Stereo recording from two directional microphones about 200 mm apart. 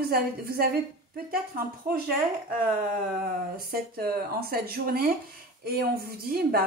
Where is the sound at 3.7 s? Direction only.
50° right (ahead or behind).